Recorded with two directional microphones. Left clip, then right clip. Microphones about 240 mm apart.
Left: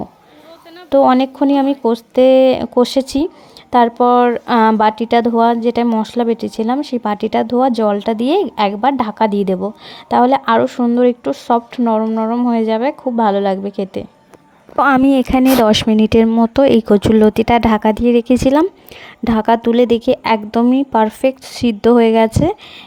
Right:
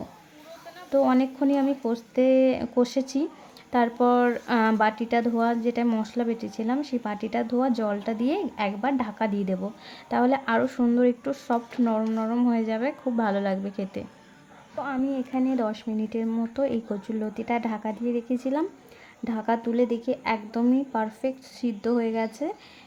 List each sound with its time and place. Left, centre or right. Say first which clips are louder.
0.9 s speech: left 11 dB; left
14.8 s speech: left 18 dB; left